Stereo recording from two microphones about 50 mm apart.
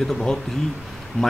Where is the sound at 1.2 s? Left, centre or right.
Left.